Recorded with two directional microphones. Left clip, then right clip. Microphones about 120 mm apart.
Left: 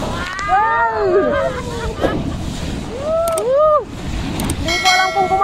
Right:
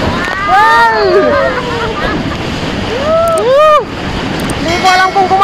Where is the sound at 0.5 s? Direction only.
20° left (ahead or behind).